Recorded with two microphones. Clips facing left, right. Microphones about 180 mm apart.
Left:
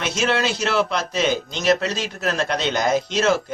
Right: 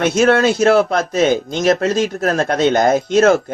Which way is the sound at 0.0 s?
55° right (ahead or behind).